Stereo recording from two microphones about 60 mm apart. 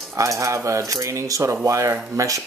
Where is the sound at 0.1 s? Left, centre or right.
Right.